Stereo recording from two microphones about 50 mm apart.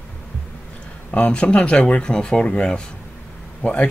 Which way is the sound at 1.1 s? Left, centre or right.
Left.